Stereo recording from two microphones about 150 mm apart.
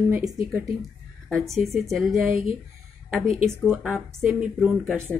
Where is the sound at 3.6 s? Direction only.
5° right (ahead or behind).